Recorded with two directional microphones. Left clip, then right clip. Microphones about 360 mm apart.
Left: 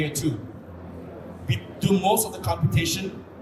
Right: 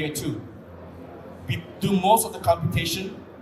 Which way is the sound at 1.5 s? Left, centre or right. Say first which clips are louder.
Left 2 dB; centre.